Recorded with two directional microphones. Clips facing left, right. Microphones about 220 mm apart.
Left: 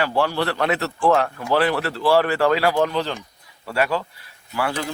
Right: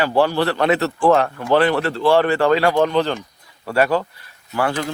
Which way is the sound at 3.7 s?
50° right (ahead or behind).